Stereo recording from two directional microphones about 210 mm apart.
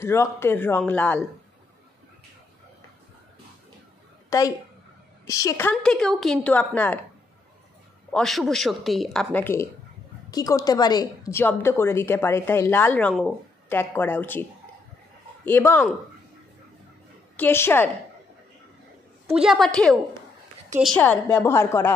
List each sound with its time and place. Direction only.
0.0 s a woman's voice: 10° left (ahead or behind)
4.3 s a woman's voice: 15° left (ahead or behind)
8.1 s a woman's voice: centre (ahead or behind)
15.4 s a woman's voice: 10° left (ahead or behind)
17.4 s a woman's voice: 10° left (ahead or behind)
19.2 s a woman's voice: centre (ahead or behind)